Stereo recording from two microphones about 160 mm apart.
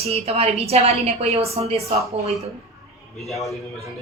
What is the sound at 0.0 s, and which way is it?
A woman's voice, 40° right (ahead or behind).